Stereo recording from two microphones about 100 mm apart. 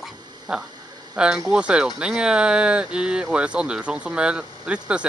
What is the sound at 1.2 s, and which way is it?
Speech, 10° right (ahead or behind).